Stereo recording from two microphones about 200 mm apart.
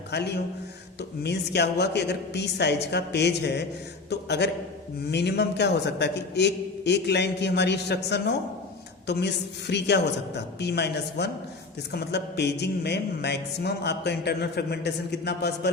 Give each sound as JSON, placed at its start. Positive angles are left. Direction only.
{"t": 0.1, "sound": "speech", "side_deg": 55}